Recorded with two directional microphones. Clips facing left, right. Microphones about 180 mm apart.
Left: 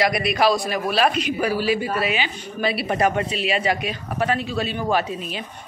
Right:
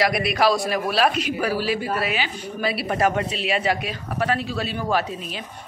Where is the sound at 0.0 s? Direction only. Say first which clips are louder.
Left 1 dB; centre (ahead or behind).